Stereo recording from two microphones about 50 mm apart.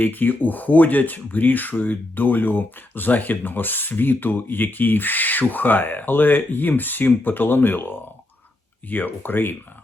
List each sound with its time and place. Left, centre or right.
0.0 s speech: left